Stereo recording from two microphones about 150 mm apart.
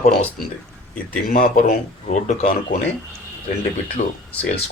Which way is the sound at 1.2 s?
65° left (ahead or behind).